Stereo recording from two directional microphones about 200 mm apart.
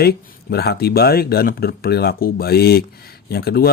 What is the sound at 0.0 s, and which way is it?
A man's voice, 50° left (ahead or behind).